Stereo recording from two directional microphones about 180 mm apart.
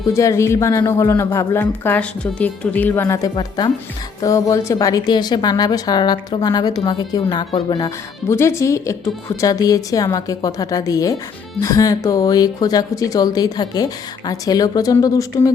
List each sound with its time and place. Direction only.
0.1 s speech: 15° left (ahead or behind)